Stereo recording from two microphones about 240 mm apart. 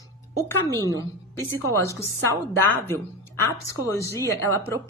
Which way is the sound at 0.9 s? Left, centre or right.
Centre.